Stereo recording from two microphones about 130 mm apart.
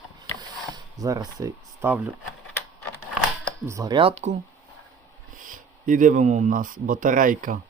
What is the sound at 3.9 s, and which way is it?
Speech, 45° right (ahead or behind).